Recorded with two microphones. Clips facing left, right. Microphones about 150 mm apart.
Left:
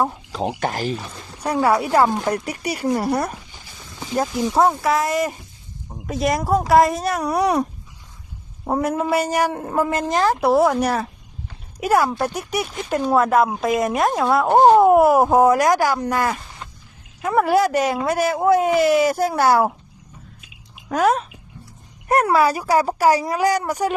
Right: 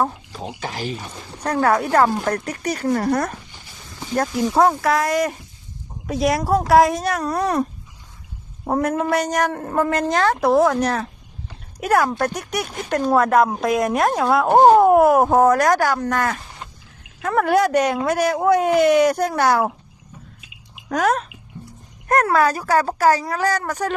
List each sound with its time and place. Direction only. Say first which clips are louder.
0.3 s speech: left 7 dB; 80° left
0.7 s speech: left 3 dB; 45° left (ahead or behind)
1.5 s speech: even; 10° left (ahead or behind)
7.2 s speech: left 5 dB; 10° left (ahead or behind)
8.6 s speech: right 1 dB; centre (ahead or behind)
20.9 s speech: left 1 dB; centre (ahead or behind)